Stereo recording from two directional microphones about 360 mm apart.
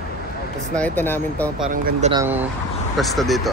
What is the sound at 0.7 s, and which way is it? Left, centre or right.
Speech, centre.